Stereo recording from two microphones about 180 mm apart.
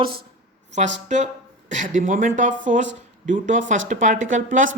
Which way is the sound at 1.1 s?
40° right (ahead or behind).